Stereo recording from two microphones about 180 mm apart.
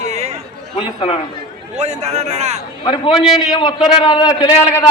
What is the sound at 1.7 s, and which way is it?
Speech, 40° right (ahead or behind).